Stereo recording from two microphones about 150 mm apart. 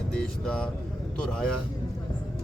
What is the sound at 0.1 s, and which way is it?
Vehicle, 5° left (ahead or behind).